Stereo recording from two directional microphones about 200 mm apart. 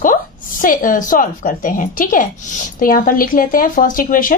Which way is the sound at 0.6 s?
45° left (ahead or behind).